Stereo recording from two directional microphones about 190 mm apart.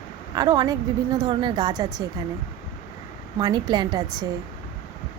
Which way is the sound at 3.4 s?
20° right (ahead or behind).